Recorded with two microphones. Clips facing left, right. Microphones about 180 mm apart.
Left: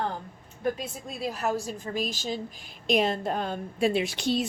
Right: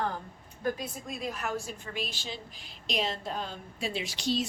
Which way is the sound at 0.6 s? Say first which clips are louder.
Left 3 dB; 30° left (ahead or behind).